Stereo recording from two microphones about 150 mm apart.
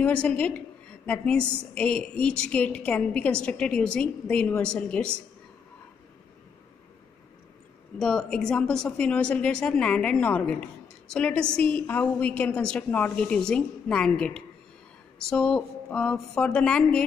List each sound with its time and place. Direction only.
0.0 s speech: 5° left (ahead or behind)
8.0 s speech: 5° left (ahead or behind)